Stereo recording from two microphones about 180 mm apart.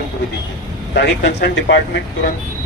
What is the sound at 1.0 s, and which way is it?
Speech, 70° left (ahead or behind).